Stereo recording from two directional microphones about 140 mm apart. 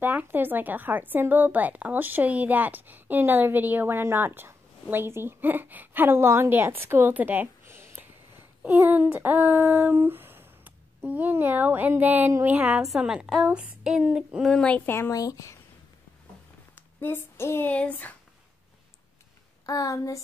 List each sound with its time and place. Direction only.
0.0 s speech: 15° right (ahead or behind); by 15.5 s 25° left (ahead or behind)
16.7 s speech: 15° left (ahead or behind)
19.6 s speech: 25° left (ahead or behind)